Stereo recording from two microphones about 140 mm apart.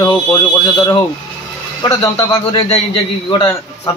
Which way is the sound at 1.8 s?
25° left (ahead or behind).